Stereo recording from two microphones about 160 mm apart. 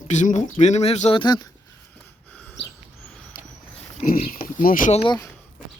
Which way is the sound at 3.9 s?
60° left (ahead or behind).